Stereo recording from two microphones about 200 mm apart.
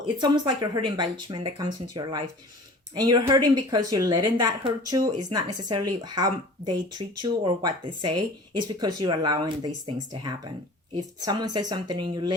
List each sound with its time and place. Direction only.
0.0 s speech: 20° right (ahead or behind)